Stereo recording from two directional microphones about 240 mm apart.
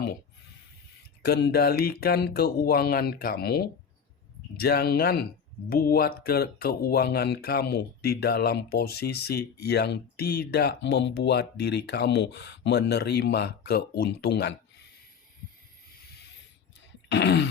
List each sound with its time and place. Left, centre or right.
1.2 s speech: left
17.1 s speech: left